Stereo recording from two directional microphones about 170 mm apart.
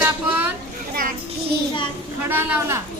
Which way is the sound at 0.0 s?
10° right (ahead or behind).